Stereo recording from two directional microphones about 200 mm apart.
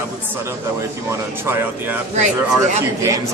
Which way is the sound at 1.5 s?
10° right (ahead or behind).